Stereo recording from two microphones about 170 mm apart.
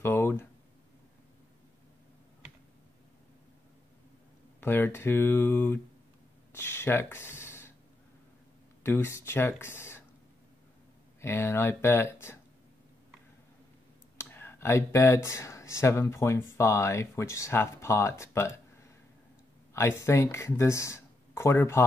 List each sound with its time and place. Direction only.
0.0 s a sound: 15° left (ahead or behind)
4.6 s speech: 10° left (ahead or behind)
8.8 s speech: 15° left (ahead or behind)
11.1 s speech: 15° left (ahead or behind)
14.1 s speech: 15° left (ahead or behind)